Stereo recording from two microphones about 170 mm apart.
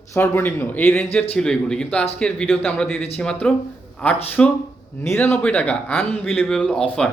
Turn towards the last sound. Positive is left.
turn(degrees=5)  # may be behind; listen again after turning